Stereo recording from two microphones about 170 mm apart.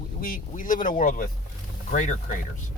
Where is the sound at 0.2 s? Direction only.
55° left (ahead or behind).